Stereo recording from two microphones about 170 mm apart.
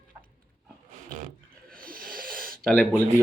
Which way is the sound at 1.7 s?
55° right (ahead or behind).